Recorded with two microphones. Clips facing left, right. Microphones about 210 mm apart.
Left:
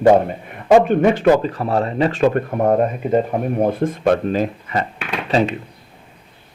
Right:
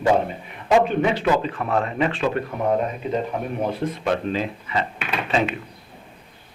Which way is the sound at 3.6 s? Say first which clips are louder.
Left 7 dB; 50° left (ahead or behind).